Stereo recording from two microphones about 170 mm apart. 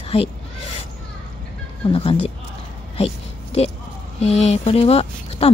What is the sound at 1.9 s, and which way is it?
Speech, 35° left (ahead or behind).